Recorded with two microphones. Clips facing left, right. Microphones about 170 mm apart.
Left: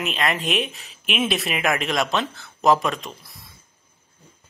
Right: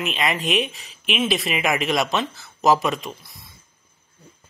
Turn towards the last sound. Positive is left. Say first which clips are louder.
# right 3 dB
turn(degrees=-5)  # may be behind; listen again after turning